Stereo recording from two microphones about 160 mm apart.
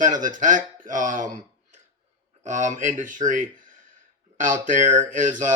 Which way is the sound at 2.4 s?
50° right (ahead or behind).